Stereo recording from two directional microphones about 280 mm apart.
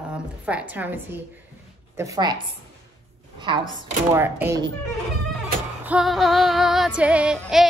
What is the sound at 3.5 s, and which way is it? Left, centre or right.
A woman's voice, centre.